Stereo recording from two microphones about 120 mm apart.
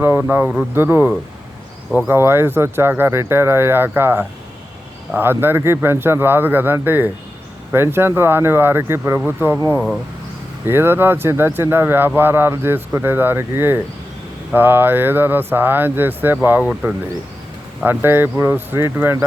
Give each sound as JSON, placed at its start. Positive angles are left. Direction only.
{"t": 0.0, "sound": "speech", "side_deg": -15}
{"t": 9.6, "sound": "speech", "side_deg": 15}
{"t": 10.7, "sound": "speech", "side_deg": -20}